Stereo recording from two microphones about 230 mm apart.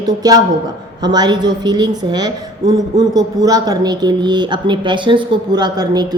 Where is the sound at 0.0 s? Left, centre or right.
Centre.